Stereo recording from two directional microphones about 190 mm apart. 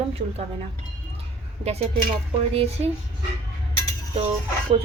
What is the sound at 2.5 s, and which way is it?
Speech, 30° right (ahead or behind).